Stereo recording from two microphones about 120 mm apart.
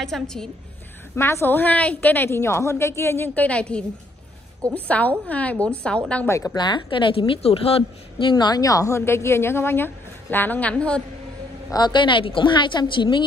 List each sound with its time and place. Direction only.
0.0 s a woman's voice: 5° left (ahead or behind)
1.1 s a woman's voice: 20° left (ahead or behind)
6.2 s a woman's voice: 25° left (ahead or behind)
6.5 s a woman's voice: 40° left (ahead or behind); by 11.0 s 10° left (ahead or behind)
11.7 s a woman's voice: 40° left (ahead or behind)